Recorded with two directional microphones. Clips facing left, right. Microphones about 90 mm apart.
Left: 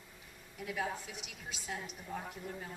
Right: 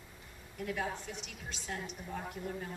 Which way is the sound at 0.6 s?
Centre (ahead or behind).